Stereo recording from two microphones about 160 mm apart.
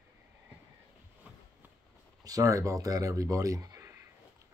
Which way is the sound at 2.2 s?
20° right (ahead or behind).